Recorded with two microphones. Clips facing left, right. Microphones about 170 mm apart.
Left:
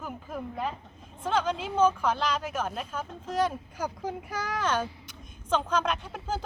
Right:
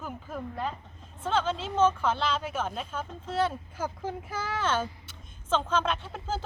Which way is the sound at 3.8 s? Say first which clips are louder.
Even; 5° right (ahead or behind).